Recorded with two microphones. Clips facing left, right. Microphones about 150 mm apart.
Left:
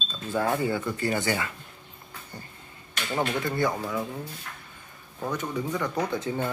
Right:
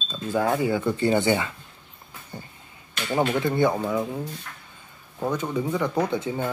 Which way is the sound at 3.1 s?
15° right (ahead or behind).